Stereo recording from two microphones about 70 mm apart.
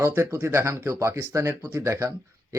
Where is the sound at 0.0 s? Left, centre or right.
Right.